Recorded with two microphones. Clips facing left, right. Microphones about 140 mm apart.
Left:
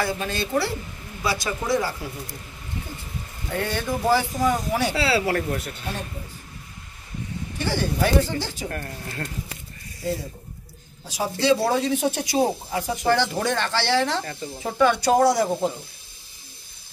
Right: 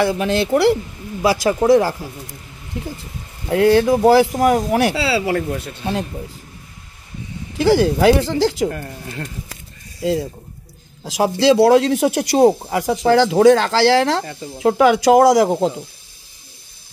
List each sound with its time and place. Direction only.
0.0 s speech: 80° right
2.8 s speech: 75° right (ahead or behind)
3.5 s speech: 90° right
4.9 s speech: 15° right (ahead or behind)
7.5 s speech: 90° right
8.6 s a woman's voice: 20° right (ahead or behind)
10.0 s speech: 90° right